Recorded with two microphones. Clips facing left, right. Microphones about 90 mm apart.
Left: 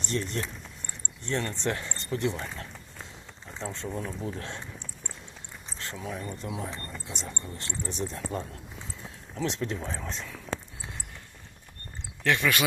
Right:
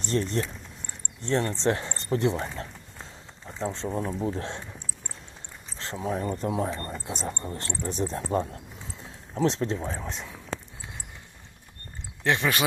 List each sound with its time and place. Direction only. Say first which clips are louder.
0.0 s speech: right 4 dB; 35° right (ahead or behind)
5.7 s speech: right 6 dB; 30° right (ahead or behind)
10.0 s speech: right 1 dB; 15° right (ahead or behind)
12.2 s speech: right 1 dB; 30° right (ahead or behind)